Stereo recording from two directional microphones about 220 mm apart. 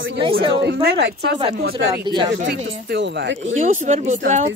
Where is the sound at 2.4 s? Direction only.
45° right (ahead or behind).